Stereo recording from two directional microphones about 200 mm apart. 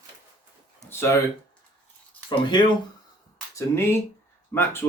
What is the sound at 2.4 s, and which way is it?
Speech, 20° left (ahead or behind).